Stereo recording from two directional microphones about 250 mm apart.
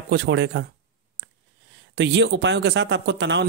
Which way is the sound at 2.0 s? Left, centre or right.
Right.